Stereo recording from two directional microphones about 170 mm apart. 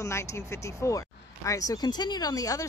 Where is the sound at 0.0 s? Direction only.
15° left (ahead or behind).